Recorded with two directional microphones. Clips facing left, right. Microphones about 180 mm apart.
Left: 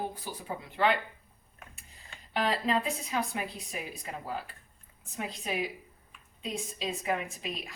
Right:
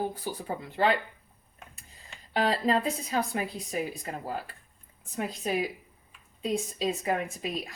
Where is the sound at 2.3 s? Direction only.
40° right (ahead or behind).